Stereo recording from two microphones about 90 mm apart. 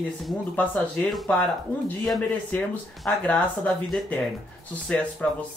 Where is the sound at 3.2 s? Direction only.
15° left (ahead or behind).